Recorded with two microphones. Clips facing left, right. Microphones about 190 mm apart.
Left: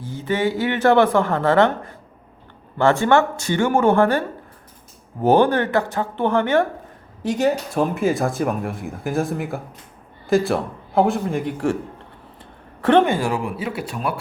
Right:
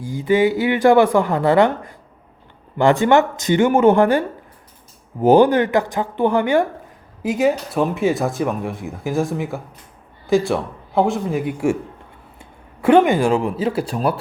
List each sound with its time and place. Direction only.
0.0 s speech: 10° right (ahead or behind)
5.2 s speech: 15° right (ahead or behind); by 14.2 s 30° right (ahead or behind)